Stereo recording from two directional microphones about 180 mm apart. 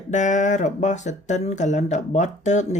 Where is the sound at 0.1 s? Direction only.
40° left (ahead or behind).